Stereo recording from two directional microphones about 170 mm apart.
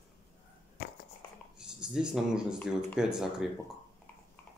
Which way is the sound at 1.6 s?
5° right (ahead or behind).